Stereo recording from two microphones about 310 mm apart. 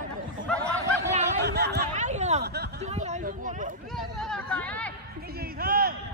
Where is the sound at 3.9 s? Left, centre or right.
Centre.